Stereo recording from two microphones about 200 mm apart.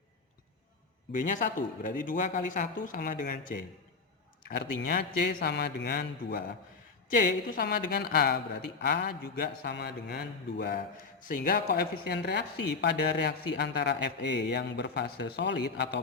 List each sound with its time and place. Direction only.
1.1 s speech: 40° left (ahead or behind)
4.9 s a woman's voice: 45° left (ahead or behind)